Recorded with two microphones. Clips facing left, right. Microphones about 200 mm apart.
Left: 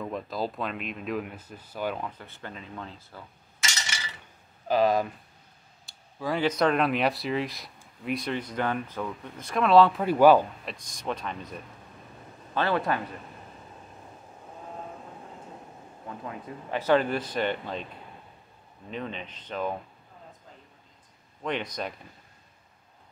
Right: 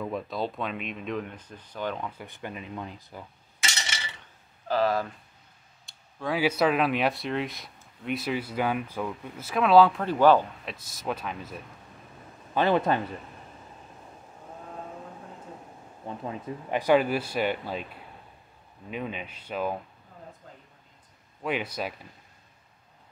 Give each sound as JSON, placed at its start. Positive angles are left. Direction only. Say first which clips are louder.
{"t": 0.0, "sound": "speech", "louder": "right 1 dB", "side_deg": 0}
{"t": 2.0, "sound": "speech", "louder": "right 2 dB", "side_deg": -15}
{"t": 4.6, "sound": "speech", "louder": "left 2 dB", "side_deg": 15}
{"t": 5.9, "sound": "speech", "louder": "even", "side_deg": 0}
{"t": 10.0, "sound": "speech", "louder": "left 2 dB", "side_deg": 10}
{"t": 10.6, "sound": "speech", "louder": "even", "side_deg": -5}
{"t": 12.5, "sound": "speech", "louder": "right 3 dB", "side_deg": -20}
{"t": 16.1, "sound": "speech", "louder": "right 4 dB", "side_deg": -25}
{"t": 16.8, "sound": "speech", "louder": "right 1 dB", "side_deg": -10}
{"t": 18.9, "sound": "speech", "louder": "right 1 dB", "side_deg": -10}
{"t": 21.4, "sound": "speech", "louder": "right 1 dB", "side_deg": -5}